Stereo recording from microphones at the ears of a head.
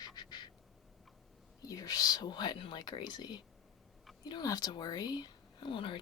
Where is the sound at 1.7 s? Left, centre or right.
Left.